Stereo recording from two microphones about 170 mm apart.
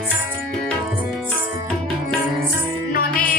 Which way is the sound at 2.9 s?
60° left (ahead or behind).